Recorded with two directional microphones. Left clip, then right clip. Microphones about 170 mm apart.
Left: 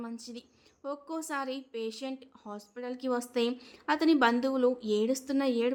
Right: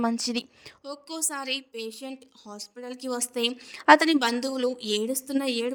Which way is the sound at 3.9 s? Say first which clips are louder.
Right 7 dB; 50° right (ahead or behind).